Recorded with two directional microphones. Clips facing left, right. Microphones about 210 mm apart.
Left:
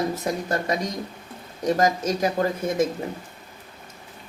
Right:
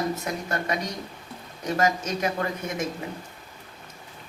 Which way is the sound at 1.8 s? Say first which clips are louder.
Left 1 dB; 35° left (ahead or behind).